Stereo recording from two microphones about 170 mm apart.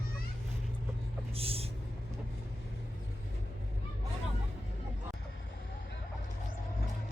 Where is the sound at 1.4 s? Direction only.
35° right (ahead or behind).